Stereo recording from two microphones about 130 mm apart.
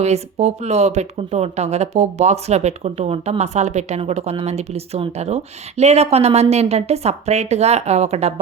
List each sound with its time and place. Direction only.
0.0 s speech: 55° right (ahead or behind)